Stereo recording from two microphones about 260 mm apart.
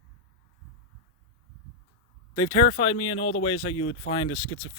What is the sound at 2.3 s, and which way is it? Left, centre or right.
Speech, centre.